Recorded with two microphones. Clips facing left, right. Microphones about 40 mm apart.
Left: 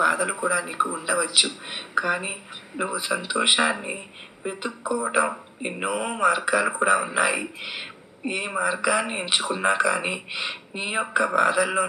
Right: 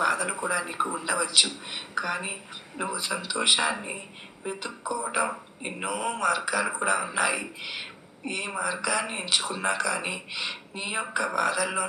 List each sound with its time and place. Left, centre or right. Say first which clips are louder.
0.0 s a man's voice: left 4 dB; centre